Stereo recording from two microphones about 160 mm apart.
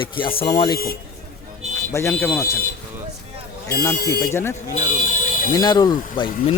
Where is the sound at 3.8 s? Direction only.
15° left (ahead or behind).